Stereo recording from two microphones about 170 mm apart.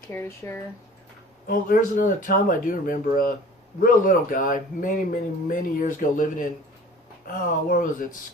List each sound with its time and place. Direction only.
0.1 s speech: 15° left (ahead or behind)
1.5 s speech: 55° left (ahead or behind)